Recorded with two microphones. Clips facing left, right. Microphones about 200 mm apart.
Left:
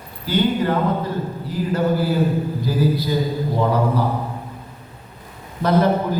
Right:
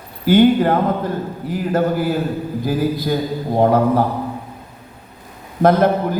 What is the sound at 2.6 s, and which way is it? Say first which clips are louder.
A man's voice: right 2 dB; 50° right (ahead or behind).